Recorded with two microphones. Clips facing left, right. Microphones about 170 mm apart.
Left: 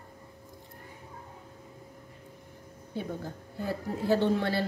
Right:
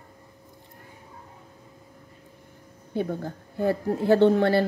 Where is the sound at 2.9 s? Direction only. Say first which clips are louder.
Right 7 dB; 60° right (ahead or behind).